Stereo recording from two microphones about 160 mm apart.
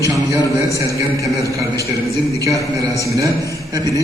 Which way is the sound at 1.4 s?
20° right (ahead or behind).